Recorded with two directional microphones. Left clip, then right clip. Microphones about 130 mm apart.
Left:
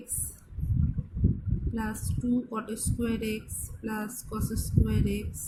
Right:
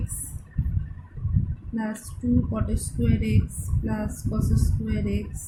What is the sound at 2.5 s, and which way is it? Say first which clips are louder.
Speech: right 3 dB; 20° left (ahead or behind).